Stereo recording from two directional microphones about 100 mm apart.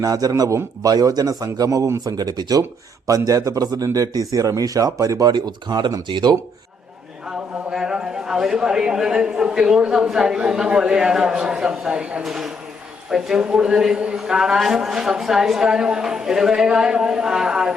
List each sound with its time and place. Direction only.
0.0 s a man's voice: 35° right (ahead or behind)
7.3 s a man's voice: 5° right (ahead or behind)